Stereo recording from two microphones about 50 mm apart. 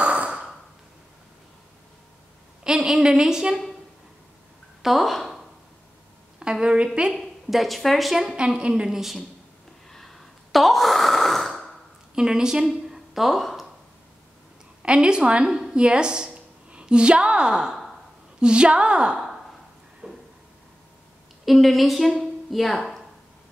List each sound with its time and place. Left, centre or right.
0.0 s sigh: right
2.6 s a woman's voice: centre
4.8 s a sound: centre
6.4 s a woman's voice: centre
7.2 s speech: centre
8.4 s a woman's voice: right
8.9 s speech: centre
9.8 s sigh: centre
12.2 s a woman's voice: centre
14.8 s a woman's voice: centre
19.1 s sigh: centre
20.0 s a sound: centre
21.5 s speech: centre